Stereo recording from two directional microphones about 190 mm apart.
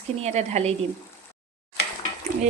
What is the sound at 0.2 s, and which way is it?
Speech, 35° right (ahead or behind).